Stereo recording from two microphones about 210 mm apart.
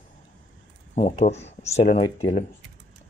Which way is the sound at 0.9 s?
35° left (ahead or behind).